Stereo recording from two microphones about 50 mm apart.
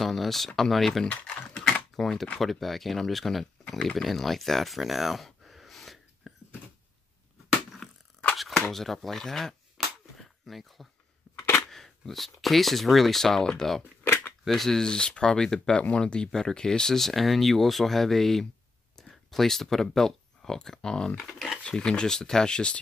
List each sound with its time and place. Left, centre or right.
0.0 s speech: centre
1.2 s typing: centre
2.0 s speech: centre
3.6 s a sound: centre
7.8 s a sound: centre
11.7 s speech: centre
14.9 s speech: centre
16.3 s speech: centre
21.6 s speech: centre